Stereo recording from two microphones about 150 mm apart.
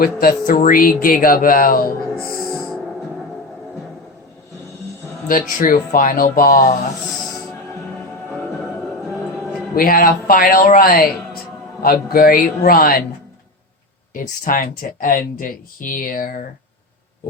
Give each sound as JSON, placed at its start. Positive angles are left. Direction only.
{"t": 0.0, "sound": "speech", "side_deg": 75}
{"t": 5.3, "sound": "speech", "side_deg": 60}
{"t": 9.7, "sound": "speech", "side_deg": 70}
{"t": 14.1, "sound": "speech", "side_deg": 65}